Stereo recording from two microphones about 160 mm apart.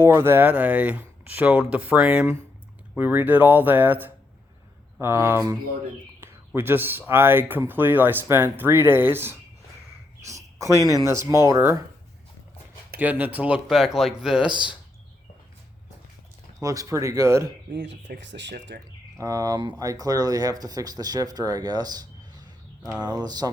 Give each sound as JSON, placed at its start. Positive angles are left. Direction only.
{"t": 0.0, "sound": "speech", "side_deg": -15}
{"t": 6.1, "sound": "a sound", "side_deg": -15}
{"t": 7.1, "sound": "speech", "side_deg": -15}
{"t": 10.2, "sound": "cricket", "side_deg": -20}
{"t": 10.8, "sound": "speech", "side_deg": -20}
{"t": 13.0, "sound": "speech", "side_deg": -10}
{"t": 16.6, "sound": "speech", "side_deg": -20}
{"t": 17.7, "sound": "speech", "side_deg": -90}
{"t": 19.2, "sound": "speech", "side_deg": -20}